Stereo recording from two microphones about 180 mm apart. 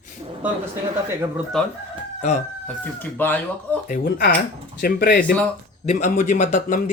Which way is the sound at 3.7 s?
10° left (ahead or behind).